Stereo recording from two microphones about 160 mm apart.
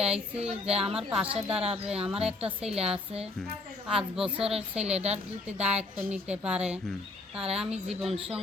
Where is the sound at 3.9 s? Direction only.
5° right (ahead or behind).